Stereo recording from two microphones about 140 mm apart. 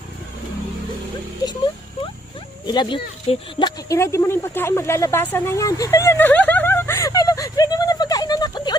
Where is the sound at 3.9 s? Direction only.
20° left (ahead or behind).